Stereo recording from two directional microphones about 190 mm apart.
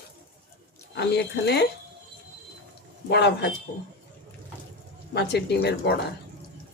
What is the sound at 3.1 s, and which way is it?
Speech, 65° left (ahead or behind).